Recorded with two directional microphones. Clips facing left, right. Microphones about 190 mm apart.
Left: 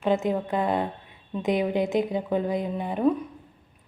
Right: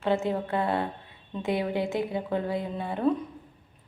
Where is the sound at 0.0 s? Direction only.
15° left (ahead or behind).